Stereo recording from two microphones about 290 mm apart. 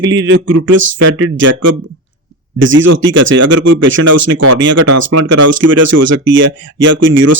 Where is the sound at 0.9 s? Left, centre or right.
Right.